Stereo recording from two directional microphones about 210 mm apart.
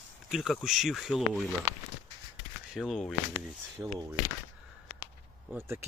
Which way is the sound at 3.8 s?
20° right (ahead or behind).